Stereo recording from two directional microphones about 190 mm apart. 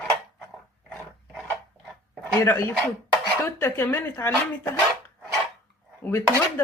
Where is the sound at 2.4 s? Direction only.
10° left (ahead or behind).